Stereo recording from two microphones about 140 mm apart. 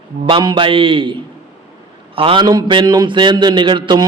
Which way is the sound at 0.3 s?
35° right (ahead or behind).